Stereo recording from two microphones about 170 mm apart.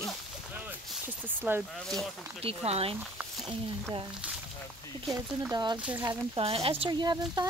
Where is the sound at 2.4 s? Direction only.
35° right (ahead or behind).